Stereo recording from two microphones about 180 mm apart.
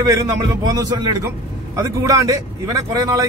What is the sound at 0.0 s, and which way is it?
Speech, 20° right (ahead or behind).